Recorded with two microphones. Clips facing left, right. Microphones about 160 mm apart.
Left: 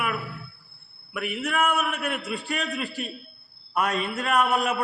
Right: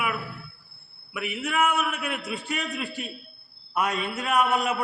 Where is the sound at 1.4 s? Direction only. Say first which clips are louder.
Even; 5° right (ahead or behind).